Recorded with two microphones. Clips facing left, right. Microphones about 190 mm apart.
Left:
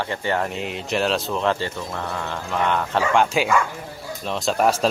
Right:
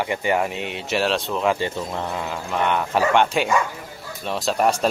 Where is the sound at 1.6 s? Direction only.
15° right (ahead or behind); by 4.8 s centre (ahead or behind).